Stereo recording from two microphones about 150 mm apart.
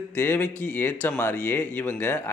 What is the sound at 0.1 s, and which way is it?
Speech, 10° left (ahead or behind).